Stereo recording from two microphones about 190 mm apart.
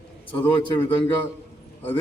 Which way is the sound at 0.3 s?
25° left (ahead or behind).